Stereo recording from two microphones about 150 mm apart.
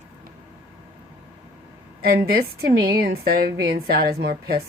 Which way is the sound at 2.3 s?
90° right.